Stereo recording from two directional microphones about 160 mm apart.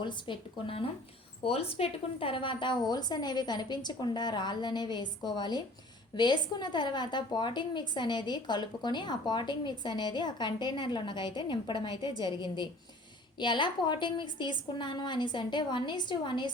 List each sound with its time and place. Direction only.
0.0 s a woman's voice: 30° left (ahead or behind)